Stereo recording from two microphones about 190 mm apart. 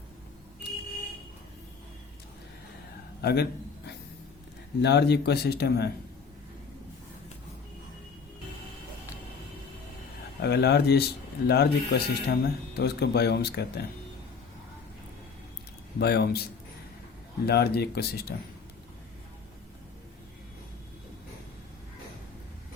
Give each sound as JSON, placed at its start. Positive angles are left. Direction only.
{"t": 3.2, "sound": "a man's voice", "side_deg": 55}
{"t": 4.8, "sound": "speech", "side_deg": 60}
{"t": 10.4, "sound": "speech", "side_deg": 60}
{"t": 16.0, "sound": "speech", "side_deg": 60}
{"t": 17.4, "sound": "speech", "side_deg": 55}